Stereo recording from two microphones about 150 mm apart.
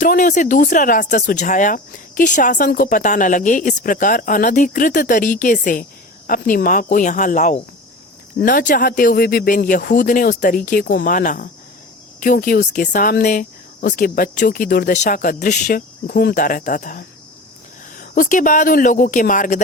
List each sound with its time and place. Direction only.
0.0 s speech: 60° left (ahead or behind)
8.4 s speech: 70° left (ahead or behind)
14.9 s speech: 55° left (ahead or behind)
15.6 s speech: 80° left; by 17.1 s 60° left (ahead or behind)
18.1 s speech: 60° left (ahead or behind)